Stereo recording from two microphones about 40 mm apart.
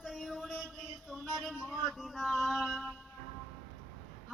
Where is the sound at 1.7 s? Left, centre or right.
Centre.